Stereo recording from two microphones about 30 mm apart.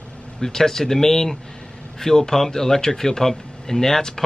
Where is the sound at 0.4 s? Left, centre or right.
Centre.